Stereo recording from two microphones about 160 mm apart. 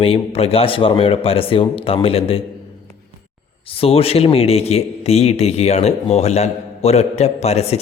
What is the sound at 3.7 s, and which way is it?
A man's voice, 35° left (ahead or behind).